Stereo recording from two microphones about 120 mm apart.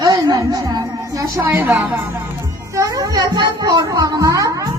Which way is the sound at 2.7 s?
30° right (ahead or behind).